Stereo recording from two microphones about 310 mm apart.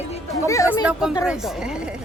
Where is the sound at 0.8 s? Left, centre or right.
Centre.